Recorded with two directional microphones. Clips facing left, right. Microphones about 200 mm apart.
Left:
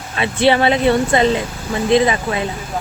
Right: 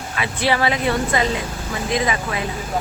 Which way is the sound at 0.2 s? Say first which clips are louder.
Left 6 dB; 25° left (ahead or behind).